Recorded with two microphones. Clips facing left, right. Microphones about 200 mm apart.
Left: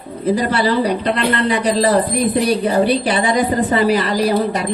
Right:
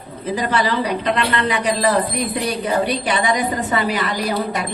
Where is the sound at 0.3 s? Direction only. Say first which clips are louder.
Left 1 dB; 35° left (ahead or behind).